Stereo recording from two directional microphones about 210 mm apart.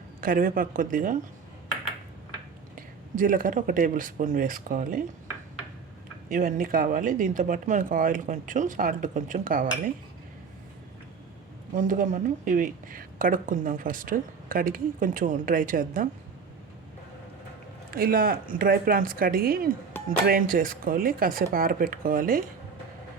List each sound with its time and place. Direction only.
0.2 s speech: 40° right (ahead or behind)
2.7 s speech: 40° right (ahead or behind)
6.2 s speech: 40° right (ahead or behind)
11.7 s speech: 40° right (ahead or behind)
17.9 s speech: 45° right (ahead or behind)